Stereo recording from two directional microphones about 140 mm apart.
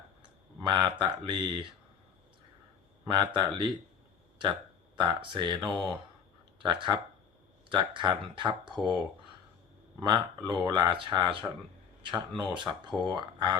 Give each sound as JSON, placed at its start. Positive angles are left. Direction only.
{"t": 0.6, "sound": "speech", "side_deg": -35}
{"t": 3.2, "sound": "speech", "side_deg": -35}
{"t": 4.9, "sound": "speech", "side_deg": -35}
{"t": 10.1, "sound": "speech", "side_deg": -30}